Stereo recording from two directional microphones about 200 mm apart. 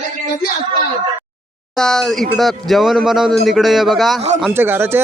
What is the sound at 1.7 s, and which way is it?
A man's voice, 5° left (ahead or behind).